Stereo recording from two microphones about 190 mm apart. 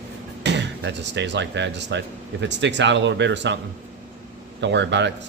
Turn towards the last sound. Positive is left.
turn(degrees=-70)  # may be behind; listen again after turning